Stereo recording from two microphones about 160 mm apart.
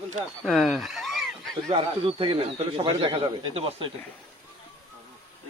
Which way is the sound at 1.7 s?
35° right (ahead or behind).